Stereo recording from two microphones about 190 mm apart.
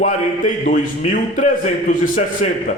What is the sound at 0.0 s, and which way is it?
A man's voice, 45° left (ahead or behind).